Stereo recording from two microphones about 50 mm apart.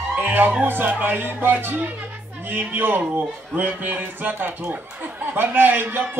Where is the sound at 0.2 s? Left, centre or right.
Right.